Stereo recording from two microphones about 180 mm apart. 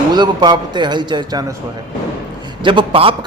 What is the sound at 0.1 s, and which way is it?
Speech, 25° right (ahead or behind).